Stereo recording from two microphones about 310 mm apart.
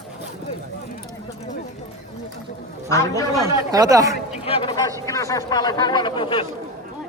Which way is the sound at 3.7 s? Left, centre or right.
Centre.